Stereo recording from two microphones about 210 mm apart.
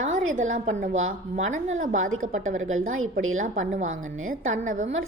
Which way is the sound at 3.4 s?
35° right (ahead or behind).